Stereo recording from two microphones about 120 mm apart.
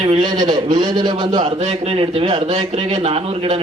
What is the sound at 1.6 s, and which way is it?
A man's voice, 60° right (ahead or behind).